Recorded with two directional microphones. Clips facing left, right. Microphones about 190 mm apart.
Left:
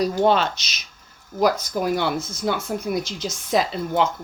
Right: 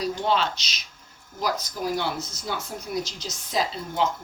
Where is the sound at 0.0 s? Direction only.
45° left (ahead or behind).